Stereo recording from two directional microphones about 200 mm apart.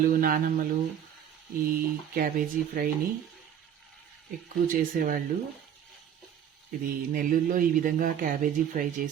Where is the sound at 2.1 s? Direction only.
45° right (ahead or behind).